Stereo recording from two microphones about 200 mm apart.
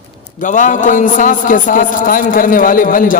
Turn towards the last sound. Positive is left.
turn(degrees=45)  # may be behind; listen again after turning